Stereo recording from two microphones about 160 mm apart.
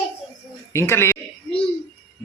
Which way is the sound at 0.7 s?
15° left (ahead or behind).